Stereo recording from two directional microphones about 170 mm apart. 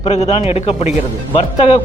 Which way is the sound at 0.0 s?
35° left (ahead or behind).